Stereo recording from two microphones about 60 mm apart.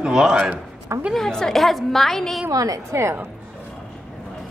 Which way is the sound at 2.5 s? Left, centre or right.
Right.